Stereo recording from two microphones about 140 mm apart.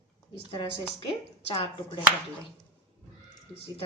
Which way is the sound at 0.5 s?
40° left (ahead or behind).